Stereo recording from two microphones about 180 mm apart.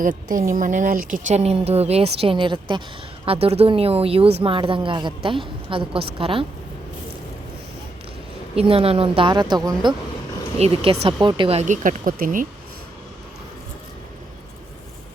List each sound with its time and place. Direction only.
0.5 s a woman's voice: 45° right (ahead or behind); by 6.4 s 30° right (ahead or behind)
8.5 s a woman's voice: 30° right (ahead or behind); by 12.5 s 50° right (ahead or behind)